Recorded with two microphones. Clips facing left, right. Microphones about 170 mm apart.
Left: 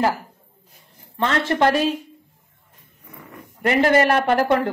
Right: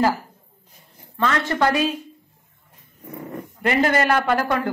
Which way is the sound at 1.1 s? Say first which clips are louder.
Left 1 dB; 20° left (ahead or behind).